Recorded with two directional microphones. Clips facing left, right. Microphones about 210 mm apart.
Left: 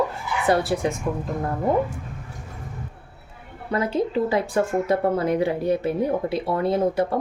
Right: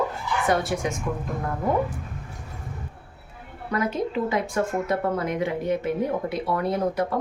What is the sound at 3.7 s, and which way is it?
Speech, 30° left (ahead or behind).